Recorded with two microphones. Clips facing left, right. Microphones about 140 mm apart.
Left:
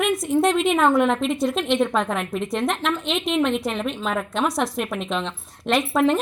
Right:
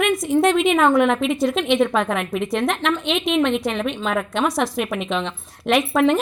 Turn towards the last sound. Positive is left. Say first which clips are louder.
# right 2 dB
turn(degrees=0)  # may be behind; listen again after turning